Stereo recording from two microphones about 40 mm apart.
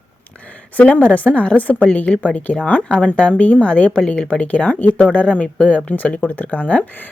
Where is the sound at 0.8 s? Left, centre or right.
Left.